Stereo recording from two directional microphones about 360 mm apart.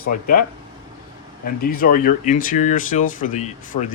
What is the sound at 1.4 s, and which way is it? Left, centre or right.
Speech, left.